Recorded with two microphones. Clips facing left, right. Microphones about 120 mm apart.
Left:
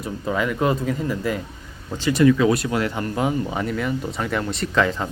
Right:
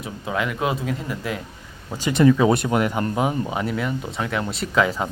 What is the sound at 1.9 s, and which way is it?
Speech, 15° right (ahead or behind).